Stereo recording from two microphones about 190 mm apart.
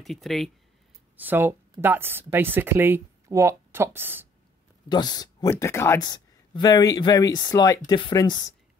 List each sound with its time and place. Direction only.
0.0 s speech: centre (ahead or behind)
1.1 s speech: 10° right (ahead or behind)
4.8 s speech: 20° left (ahead or behind)